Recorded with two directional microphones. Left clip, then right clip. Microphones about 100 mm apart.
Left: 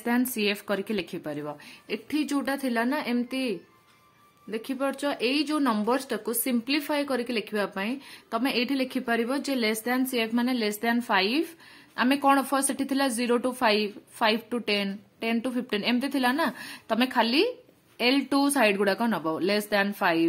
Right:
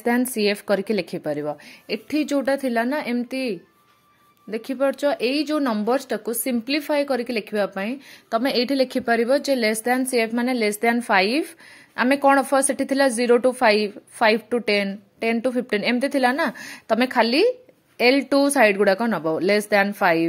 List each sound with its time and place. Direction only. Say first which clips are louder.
0.0 s speech: right 6 dB; 50° right (ahead or behind)
1.9 s speech: right 6 dB; 60° right (ahead or behind)
4.5 s speech: right 7 dB; 60° right (ahead or behind)